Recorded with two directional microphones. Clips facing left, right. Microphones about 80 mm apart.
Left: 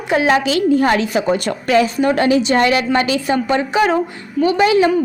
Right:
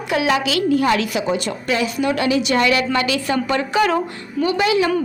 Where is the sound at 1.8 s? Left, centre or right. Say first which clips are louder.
Left 4 dB; left.